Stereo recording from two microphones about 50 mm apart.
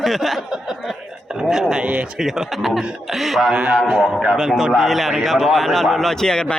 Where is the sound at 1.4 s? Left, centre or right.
Centre.